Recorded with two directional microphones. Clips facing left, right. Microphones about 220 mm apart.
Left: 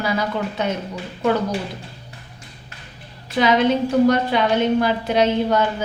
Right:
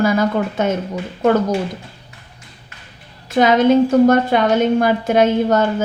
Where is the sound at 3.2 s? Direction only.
45° right (ahead or behind).